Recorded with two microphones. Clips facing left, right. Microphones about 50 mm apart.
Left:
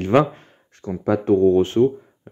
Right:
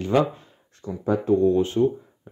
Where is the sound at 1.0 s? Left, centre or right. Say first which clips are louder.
Left 4 dB; left.